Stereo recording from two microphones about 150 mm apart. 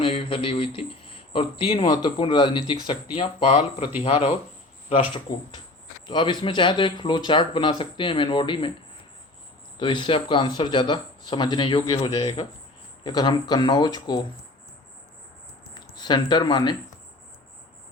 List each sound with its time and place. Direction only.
0.0 s speech: 35° left (ahead or behind)
6.1 s speech: 30° left (ahead or behind)
9.7 s speech: 30° left (ahead or behind)
15.7 s speech: 30° left (ahead or behind)